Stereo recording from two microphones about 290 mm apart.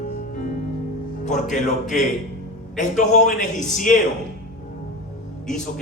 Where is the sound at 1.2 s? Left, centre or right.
Left.